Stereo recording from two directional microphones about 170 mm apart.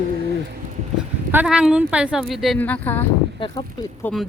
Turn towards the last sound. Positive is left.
turn(degrees=10)  # may be behind; listen again after turning